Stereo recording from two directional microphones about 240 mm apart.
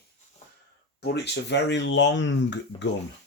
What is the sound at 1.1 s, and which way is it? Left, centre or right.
Speech, left.